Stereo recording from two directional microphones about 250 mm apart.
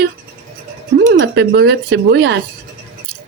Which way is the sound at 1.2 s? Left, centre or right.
Right.